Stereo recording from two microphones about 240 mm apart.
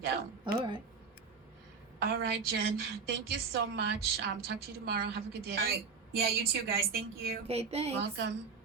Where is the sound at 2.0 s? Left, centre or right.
Right.